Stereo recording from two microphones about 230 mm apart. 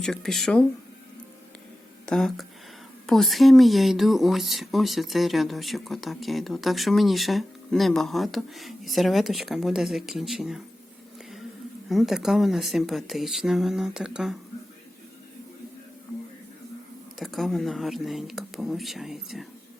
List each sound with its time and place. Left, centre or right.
0.0 s speech: centre
2.0 s speech: centre
11.9 s speech: centre
17.2 s speech: centre